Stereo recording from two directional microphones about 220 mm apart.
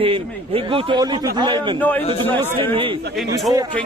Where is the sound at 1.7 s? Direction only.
10° left (ahead or behind).